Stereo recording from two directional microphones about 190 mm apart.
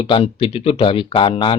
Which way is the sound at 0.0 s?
30° left (ahead or behind).